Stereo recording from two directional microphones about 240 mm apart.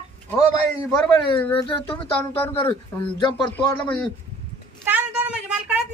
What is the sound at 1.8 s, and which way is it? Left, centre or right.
Speech, left.